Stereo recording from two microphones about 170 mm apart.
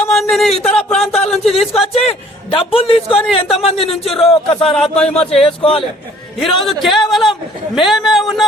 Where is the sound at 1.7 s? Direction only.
35° left (ahead or behind).